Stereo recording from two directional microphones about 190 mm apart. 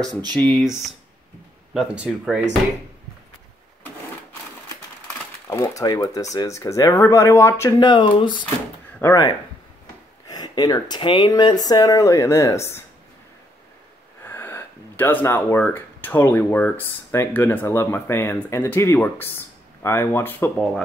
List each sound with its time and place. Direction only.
0.4 s speech: 5° left (ahead or behind)
5.5 s speech: 15° left (ahead or behind)
14.2 s speech: 10° left (ahead or behind)